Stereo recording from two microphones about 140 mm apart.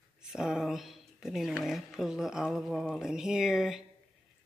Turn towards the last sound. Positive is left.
turn(degrees=-5)  # may be behind; listen again after turning